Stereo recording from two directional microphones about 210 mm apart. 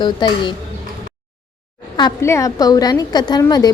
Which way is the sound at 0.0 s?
20° left (ahead or behind).